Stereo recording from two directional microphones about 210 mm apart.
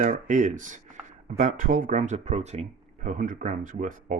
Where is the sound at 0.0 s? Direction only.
35° right (ahead or behind).